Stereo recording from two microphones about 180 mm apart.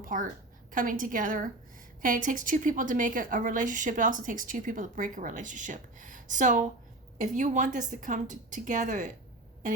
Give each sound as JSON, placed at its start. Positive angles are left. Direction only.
{"t": 0.0, "sound": "a woman's voice", "side_deg": -50}